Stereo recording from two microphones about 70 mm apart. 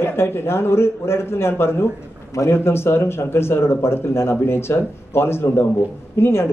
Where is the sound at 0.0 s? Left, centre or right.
Left.